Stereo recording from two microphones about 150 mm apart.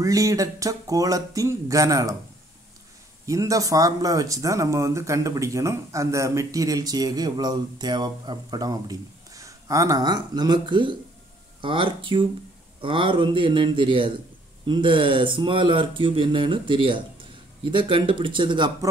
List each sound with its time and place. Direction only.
0.0 s speech: 20° right (ahead or behind)
3.3 s speech: 20° right (ahead or behind)